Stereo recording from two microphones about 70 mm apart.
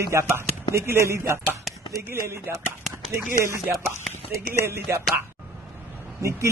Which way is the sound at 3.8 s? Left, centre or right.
Right.